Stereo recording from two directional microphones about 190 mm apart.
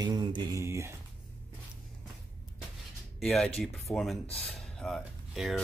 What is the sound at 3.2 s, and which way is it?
Speech, 5° left (ahead or behind).